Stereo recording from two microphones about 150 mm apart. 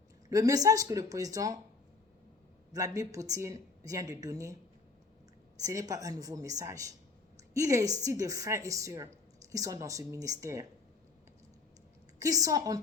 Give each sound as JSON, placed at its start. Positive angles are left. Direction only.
{"t": 0.3, "sound": "speech", "side_deg": -20}
{"t": 2.7, "sound": "speech", "side_deg": -20}
{"t": 5.6, "sound": "speech", "side_deg": -20}
{"t": 12.2, "sound": "speech", "side_deg": -25}